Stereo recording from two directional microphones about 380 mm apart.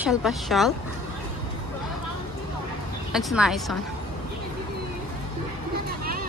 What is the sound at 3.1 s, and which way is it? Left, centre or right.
Speech, centre.